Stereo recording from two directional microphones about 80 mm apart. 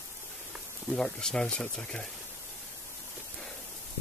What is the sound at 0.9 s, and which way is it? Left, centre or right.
Speech, centre.